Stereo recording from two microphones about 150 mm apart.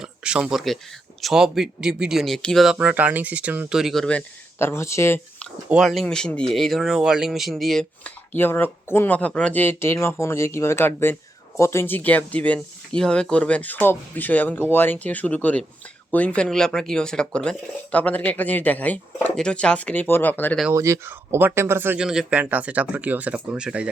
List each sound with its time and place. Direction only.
0.0 s speech: 5° right (ahead or behind)
2.7 s speech: 10° right (ahead or behind)
4.5 s speech: 15° left (ahead or behind)
5.6 s speech: 5° right (ahead or behind)
8.4 s speech: 15° left (ahead or behind)
20.7 s speech: 20° right (ahead or behind)